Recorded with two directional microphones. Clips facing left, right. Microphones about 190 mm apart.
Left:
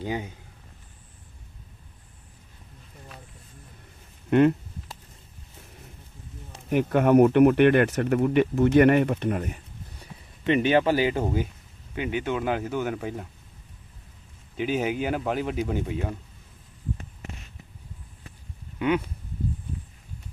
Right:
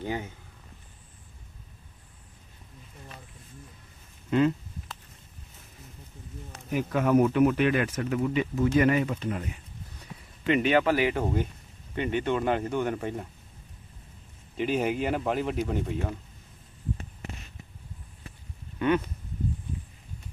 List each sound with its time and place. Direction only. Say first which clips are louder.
0.0 s speech: left 2 dB; 15° left (ahead or behind)
4.3 s speech: left 5 dB; 60° left (ahead or behind)
6.7 s speech: left 5 dB; 60° left (ahead or behind)
10.4 s speech: left 2 dB; 30° left (ahead or behind)
11.9 s speech: right 1 dB; 5° left (ahead or behind)
14.5 s speech: left 1 dB; centre (ahead or behind)
18.8 s a sound: even; 10° left (ahead or behind)